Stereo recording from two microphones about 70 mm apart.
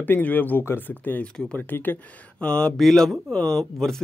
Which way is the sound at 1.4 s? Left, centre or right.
Centre.